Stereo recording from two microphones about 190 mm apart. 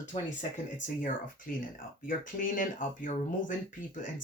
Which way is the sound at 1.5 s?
45° left (ahead or behind).